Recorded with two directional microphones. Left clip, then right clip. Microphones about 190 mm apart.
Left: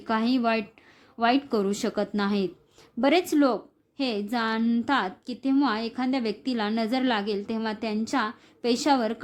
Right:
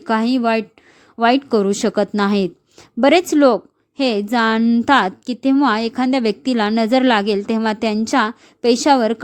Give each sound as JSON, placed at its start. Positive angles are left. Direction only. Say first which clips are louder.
{"t": 0.0, "sound": "a woman's voice", "louder": "right 8 dB", "side_deg": -30}